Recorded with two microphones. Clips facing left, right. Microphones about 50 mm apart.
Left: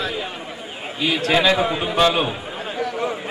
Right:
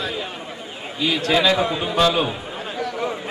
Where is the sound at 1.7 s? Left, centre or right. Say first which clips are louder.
Left 1 dB; centre.